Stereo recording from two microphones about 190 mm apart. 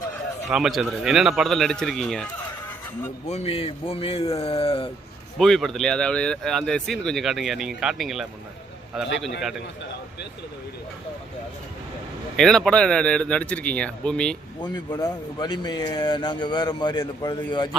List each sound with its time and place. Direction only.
0.4 s speech: centre (ahead or behind)
3.2 s speech: 35° left (ahead or behind)
5.4 s speech: centre (ahead or behind)
12.4 s speech: centre (ahead or behind)
14.6 s speech: 20° left (ahead or behind)